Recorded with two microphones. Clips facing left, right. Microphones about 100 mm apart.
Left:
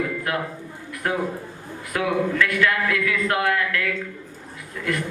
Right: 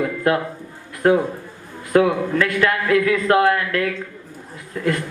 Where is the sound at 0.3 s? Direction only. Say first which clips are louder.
Right 7 dB; 35° right (ahead or behind).